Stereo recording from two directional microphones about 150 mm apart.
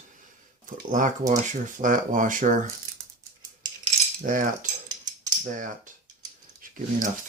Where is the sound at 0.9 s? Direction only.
60° right (ahead or behind).